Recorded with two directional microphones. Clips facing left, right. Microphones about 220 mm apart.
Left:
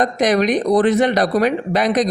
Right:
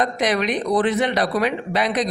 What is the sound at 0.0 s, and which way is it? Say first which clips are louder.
Speech: left 5 dB; 45° left (ahead or behind).